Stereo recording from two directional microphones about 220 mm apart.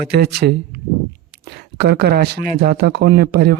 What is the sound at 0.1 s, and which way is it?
Speech, 45° right (ahead or behind).